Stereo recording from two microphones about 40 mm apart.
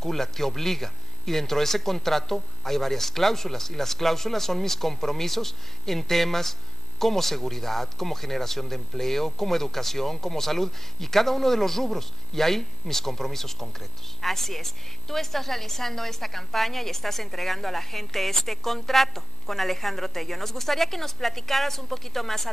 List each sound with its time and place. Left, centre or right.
0.0 s speech: centre